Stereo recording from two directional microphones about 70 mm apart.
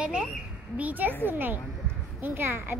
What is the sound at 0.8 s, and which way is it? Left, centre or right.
A child's voice, right.